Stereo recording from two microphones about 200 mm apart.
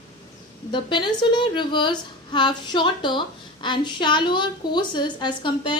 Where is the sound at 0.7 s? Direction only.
25° left (ahead or behind).